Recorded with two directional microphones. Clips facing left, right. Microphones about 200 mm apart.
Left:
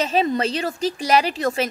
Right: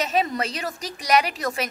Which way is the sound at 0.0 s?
30° left (ahead or behind).